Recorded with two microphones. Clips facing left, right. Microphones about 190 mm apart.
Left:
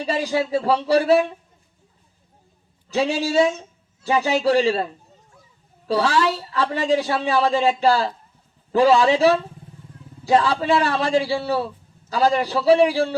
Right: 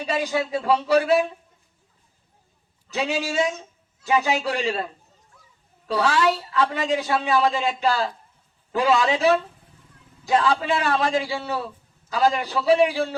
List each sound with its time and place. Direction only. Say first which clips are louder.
0.0 s a man's voice: left 2 dB; 35° left (ahead or behind)
2.9 s a man's voice: left 5 dB; 35° left (ahead or behind)
5.9 s a man's voice: left 1 dB; 35° left (ahead or behind)